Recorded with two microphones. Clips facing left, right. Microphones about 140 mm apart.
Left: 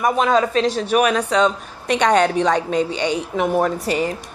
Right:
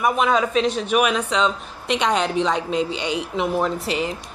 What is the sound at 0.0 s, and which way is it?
Speech, 40° left (ahead or behind).